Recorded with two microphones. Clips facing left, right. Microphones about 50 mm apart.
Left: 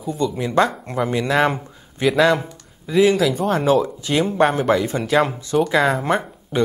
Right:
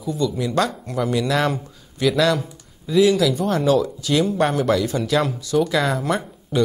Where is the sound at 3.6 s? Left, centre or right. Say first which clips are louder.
Even; left.